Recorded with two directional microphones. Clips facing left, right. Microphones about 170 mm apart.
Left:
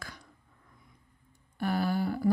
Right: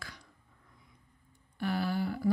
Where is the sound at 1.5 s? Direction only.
45° left (ahead or behind).